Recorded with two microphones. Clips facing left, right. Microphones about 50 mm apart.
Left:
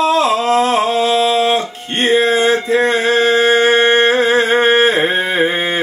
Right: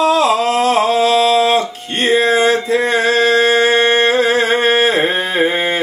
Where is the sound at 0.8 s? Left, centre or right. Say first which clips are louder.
Right 1 dB; left.